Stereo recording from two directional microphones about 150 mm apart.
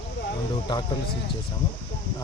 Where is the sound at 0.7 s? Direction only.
30° left (ahead or behind).